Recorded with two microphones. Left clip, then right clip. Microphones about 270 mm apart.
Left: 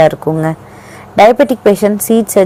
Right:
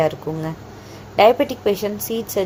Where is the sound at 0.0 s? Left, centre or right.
Left.